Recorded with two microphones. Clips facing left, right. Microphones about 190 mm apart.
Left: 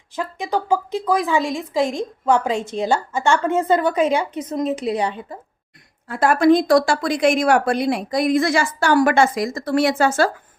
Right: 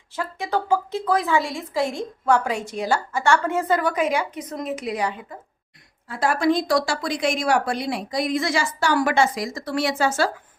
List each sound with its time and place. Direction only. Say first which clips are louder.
0.2 s a woman's voice: left 2 dB; 15° left (ahead or behind)
6.1 s speech: left 6 dB; 55° left (ahead or behind)